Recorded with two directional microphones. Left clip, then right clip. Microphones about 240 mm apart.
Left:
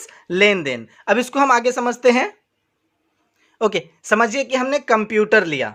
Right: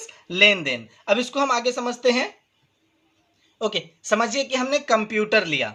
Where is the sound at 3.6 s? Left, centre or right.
Left.